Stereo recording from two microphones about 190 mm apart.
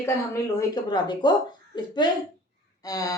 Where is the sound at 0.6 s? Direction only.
20° left (ahead or behind).